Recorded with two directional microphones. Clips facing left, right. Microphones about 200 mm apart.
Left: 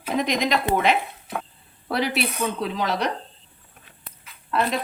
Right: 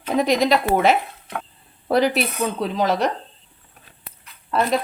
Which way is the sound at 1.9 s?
45° right (ahead or behind).